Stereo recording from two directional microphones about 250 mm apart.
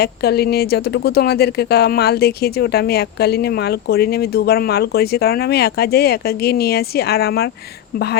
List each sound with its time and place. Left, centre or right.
0.0 s speech: left